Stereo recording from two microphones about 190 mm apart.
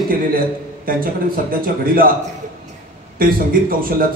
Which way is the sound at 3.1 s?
50° right (ahead or behind).